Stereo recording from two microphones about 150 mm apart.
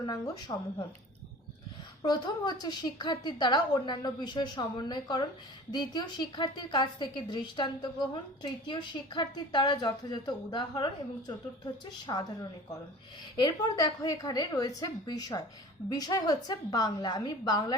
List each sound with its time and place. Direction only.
0.0 s a woman's voice: 25° left (ahead or behind)
2.0 s a woman's voice: 25° left (ahead or behind)